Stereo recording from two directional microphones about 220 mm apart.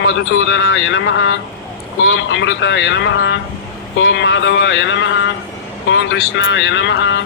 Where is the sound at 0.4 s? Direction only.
55° left (ahead or behind).